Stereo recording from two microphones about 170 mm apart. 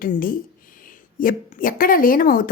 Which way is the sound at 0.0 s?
55° left (ahead or behind).